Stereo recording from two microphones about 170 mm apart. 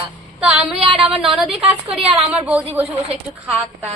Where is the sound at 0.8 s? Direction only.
35° right (ahead or behind).